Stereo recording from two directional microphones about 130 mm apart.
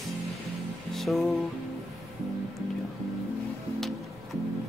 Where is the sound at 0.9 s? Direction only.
Centre (ahead or behind).